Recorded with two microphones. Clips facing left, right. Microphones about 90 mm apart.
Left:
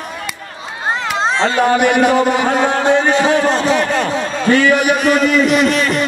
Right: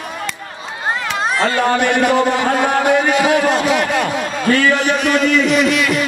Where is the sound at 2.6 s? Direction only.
30° left (ahead or behind).